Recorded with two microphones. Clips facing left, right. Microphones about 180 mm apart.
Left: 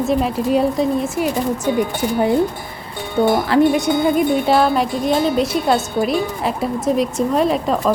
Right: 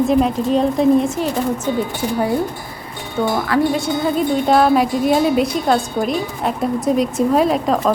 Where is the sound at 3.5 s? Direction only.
25° left (ahead or behind).